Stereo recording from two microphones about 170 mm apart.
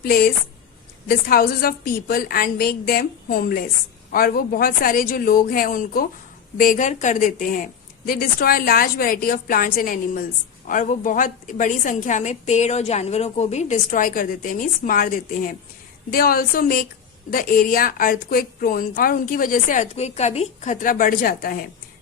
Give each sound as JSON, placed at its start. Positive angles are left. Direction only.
{"t": 0.0, "sound": "a woman's voice", "side_deg": 60}